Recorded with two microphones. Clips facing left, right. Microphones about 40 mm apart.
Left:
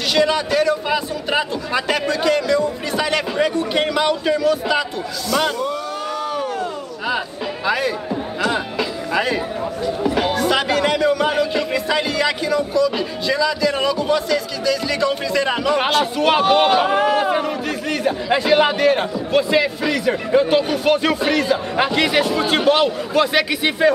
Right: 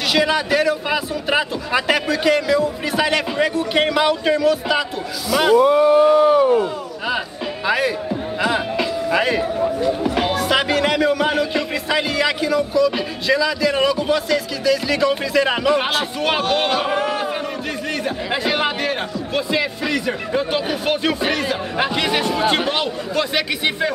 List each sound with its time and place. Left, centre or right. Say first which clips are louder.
0.1 s a man's voice: left 1 dB; centre
5.6 s a sound: right 11 dB; right
7.6 s a man's voice: right 1 dB; centre
17.8 s a man's voice: left 5 dB; centre